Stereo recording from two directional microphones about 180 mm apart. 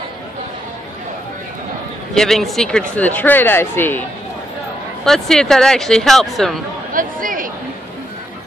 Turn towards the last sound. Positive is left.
turn(degrees=-50)  # may be behind; listen again after turning